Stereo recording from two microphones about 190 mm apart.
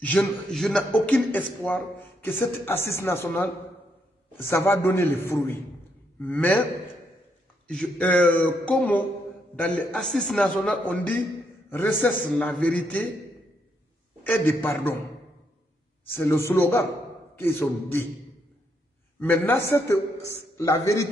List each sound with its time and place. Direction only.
0.0 s a man's voice: 5° left (ahead or behind)
4.5 s a man's voice: 10° left (ahead or behind)
7.6 s a man's voice: 5° left (ahead or behind)
14.2 s a man's voice: 10° left (ahead or behind)
16.1 s a man's voice: 15° left (ahead or behind)
19.1 s a man's voice: 10° left (ahead or behind)